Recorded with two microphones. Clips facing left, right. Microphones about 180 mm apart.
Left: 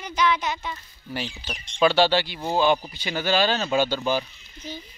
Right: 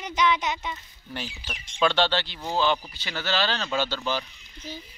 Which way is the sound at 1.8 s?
10° left (ahead or behind).